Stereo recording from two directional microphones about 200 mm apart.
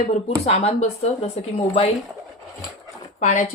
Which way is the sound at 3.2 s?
40° left (ahead or behind).